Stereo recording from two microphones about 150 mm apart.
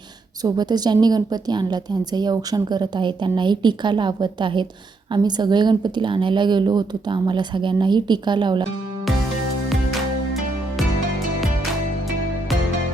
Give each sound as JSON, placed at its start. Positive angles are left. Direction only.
{"t": 0.4, "sound": "a woman's voice", "side_deg": -25}